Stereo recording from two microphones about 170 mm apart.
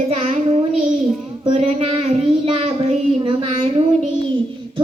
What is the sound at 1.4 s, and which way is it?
Child singing, 35° right (ahead or behind).